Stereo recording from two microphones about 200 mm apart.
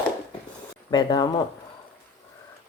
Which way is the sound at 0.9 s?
20° left (ahead or behind).